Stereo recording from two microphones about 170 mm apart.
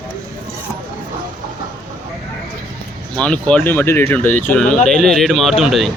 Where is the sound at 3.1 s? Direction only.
5° left (ahead or behind).